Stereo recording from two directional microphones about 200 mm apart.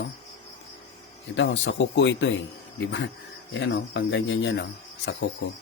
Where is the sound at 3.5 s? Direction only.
65° left (ahead or behind).